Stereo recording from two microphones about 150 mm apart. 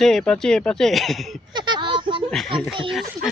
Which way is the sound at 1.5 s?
30° right (ahead or behind).